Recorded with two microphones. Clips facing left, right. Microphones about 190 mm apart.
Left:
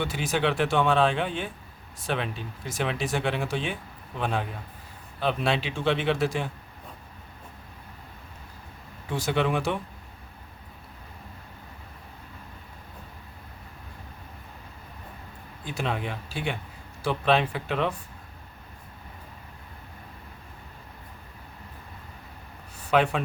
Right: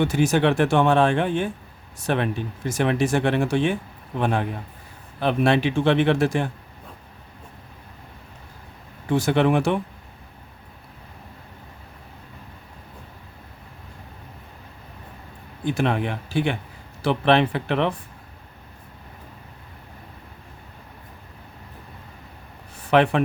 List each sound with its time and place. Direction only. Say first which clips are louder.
0.0 s speech: right 7 dB; 45° right (ahead or behind)
9.0 s speech: right 7 dB; 55° right (ahead or behind)
15.8 s speech: right 5 dB; 65° right (ahead or behind)
22.9 s speech: right 5 dB; 60° right (ahead or behind)